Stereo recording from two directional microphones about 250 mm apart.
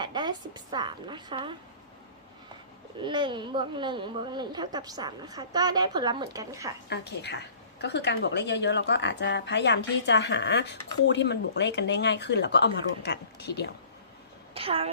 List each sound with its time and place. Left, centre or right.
0.0 s a woman's voice: centre
3.0 s speech: centre
6.9 s a woman's voice: left
14.5 s a woman's voice: right